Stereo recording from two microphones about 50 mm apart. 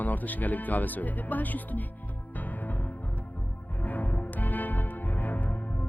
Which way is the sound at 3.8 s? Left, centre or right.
Left.